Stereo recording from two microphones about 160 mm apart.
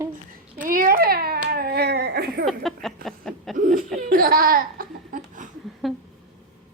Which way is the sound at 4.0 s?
60° right (ahead or behind).